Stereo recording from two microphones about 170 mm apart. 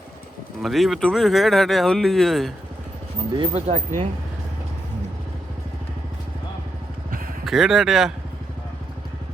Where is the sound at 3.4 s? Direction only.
40° right (ahead or behind).